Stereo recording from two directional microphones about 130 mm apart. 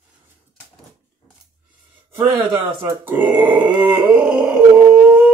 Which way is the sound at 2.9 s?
15° right (ahead or behind).